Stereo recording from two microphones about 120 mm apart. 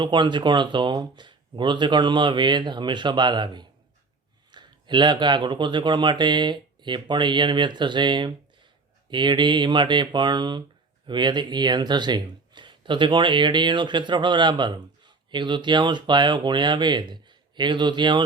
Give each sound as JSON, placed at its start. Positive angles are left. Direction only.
{"t": 0.0, "sound": "speech", "side_deg": -40}